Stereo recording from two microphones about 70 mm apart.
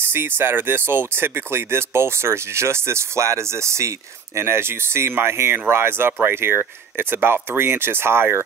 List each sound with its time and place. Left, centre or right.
0.0 s speech: right